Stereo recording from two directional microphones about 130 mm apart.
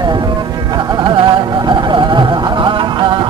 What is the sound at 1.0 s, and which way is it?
Music, 35° right (ahead or behind).